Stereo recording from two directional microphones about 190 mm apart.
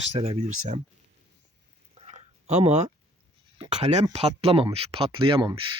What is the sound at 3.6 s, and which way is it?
Speech, 35° right (ahead or behind).